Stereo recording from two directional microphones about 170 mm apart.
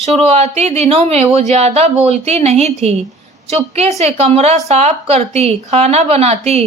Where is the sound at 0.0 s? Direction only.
40° right (ahead or behind).